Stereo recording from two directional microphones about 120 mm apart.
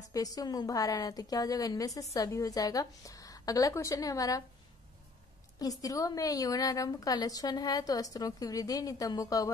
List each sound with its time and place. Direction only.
0.1 s a woman's voice: 30° left (ahead or behind)
5.6 s a woman's voice: 30° left (ahead or behind)